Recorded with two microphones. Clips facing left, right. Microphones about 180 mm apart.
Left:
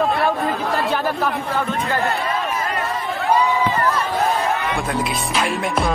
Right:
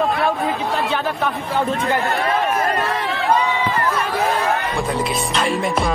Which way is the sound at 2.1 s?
60° right (ahead or behind).